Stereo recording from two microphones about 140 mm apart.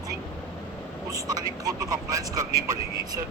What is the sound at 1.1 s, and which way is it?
Speech, 25° right (ahead or behind).